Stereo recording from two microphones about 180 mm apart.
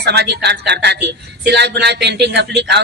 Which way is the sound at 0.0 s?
65° right (ahead or behind).